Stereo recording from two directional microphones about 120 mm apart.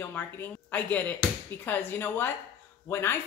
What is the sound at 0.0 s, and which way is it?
A woman's voice, 15° left (ahead or behind).